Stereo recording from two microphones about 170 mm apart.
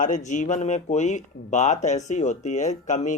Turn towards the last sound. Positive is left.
turn(degrees=45)  # may be behind; listen again after turning